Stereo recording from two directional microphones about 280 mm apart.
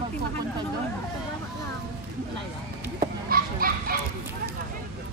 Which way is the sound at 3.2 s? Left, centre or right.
Right.